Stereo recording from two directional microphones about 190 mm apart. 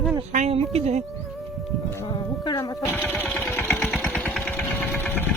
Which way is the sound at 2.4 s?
20° left (ahead or behind).